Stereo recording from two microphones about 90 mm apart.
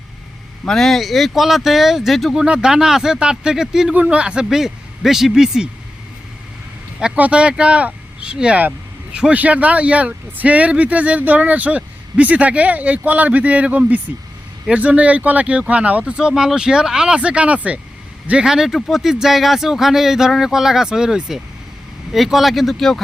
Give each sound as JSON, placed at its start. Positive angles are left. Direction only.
{"t": 0.6, "sound": "speech", "side_deg": 5}
{"t": 7.0, "sound": "speech", "side_deg": -10}